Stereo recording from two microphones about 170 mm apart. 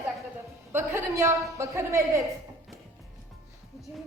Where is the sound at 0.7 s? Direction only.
15° right (ahead or behind).